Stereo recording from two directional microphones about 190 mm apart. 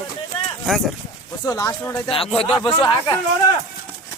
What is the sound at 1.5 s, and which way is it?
Speech, 20° left (ahead or behind).